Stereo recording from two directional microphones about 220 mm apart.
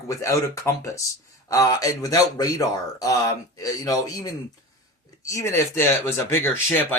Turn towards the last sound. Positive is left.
turn(degrees=10)  # may be behind; listen again after turning